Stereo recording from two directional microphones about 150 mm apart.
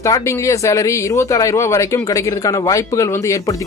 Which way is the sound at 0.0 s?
20° left (ahead or behind).